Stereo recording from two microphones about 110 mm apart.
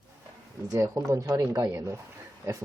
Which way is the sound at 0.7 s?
30° right (ahead or behind).